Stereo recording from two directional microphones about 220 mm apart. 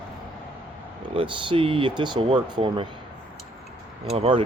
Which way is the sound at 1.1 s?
25° right (ahead or behind).